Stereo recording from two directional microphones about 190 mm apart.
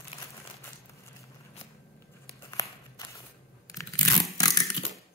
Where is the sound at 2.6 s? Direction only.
15° left (ahead or behind).